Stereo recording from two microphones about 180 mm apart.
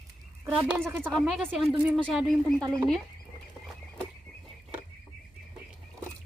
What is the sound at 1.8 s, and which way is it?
Speech, 10° right (ahead or behind).